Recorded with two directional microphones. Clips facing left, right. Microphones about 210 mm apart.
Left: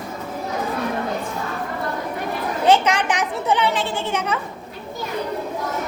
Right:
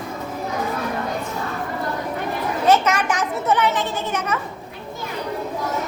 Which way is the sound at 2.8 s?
15° left (ahead or behind).